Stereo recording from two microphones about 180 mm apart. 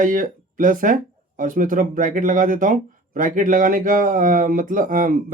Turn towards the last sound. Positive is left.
turn(degrees=-50)  # may be behind; listen again after turning